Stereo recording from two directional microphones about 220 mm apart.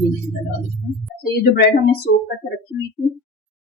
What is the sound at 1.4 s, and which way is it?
Speech, 45° left (ahead or behind).